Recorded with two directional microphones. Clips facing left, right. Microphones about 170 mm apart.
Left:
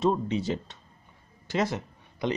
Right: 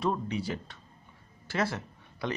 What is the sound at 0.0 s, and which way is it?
Speech, 25° left (ahead or behind).